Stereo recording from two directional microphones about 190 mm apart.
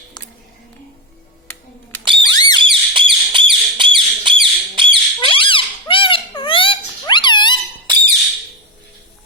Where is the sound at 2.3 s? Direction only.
20° left (ahead or behind).